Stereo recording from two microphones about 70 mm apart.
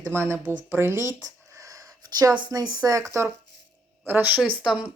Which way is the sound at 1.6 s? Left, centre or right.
Right.